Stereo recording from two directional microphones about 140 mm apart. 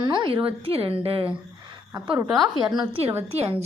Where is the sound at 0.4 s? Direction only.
40° right (ahead or behind).